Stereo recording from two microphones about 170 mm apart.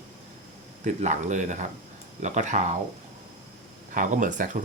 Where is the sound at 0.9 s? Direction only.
45° right (ahead or behind).